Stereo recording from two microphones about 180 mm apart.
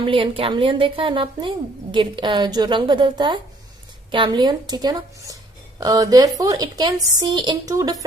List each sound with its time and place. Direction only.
0.0 s speech: 30° right (ahead or behind)